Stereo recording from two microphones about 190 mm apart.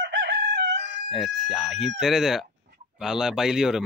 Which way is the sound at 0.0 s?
70° right (ahead or behind).